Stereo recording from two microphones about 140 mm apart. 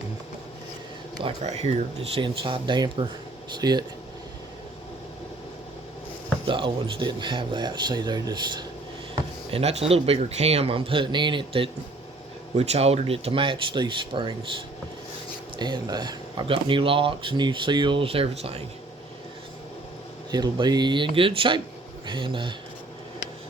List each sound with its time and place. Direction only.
1.5 s speech: 45° right (ahead or behind); by 3.8 s 30° right (ahead or behind)
6.5 s speech: 35° right (ahead or behind)
9.5 s speech: 45° right (ahead or behind)
20.3 s speech: 30° right (ahead or behind)